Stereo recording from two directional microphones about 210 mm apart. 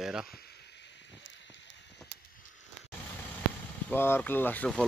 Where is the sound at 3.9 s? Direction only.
10° left (ahead or behind).